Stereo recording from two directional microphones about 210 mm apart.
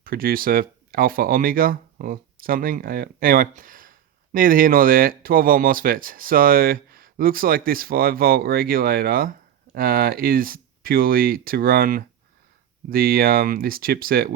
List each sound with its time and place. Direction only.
0.0 s speech: 45° right (ahead or behind)